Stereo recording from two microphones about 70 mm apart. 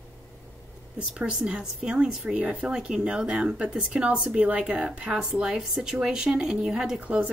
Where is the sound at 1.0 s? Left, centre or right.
Centre.